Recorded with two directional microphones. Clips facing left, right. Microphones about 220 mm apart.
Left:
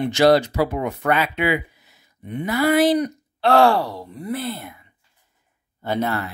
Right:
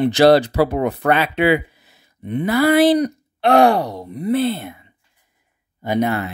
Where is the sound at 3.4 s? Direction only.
20° right (ahead or behind).